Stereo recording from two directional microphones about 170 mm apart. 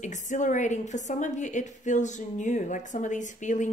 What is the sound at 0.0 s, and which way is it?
A woman's voice, 45° left (ahead or behind).